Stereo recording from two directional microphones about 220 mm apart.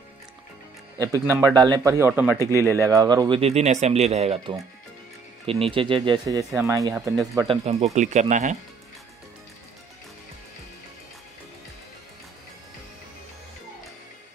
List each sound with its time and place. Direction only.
0.9 s a man's voice: 15° right (ahead or behind)
2.5 s speech: 10° left (ahead or behind)
2.8 s speech: 15° right (ahead or behind)
7.3 s speech: 25° right (ahead or behind)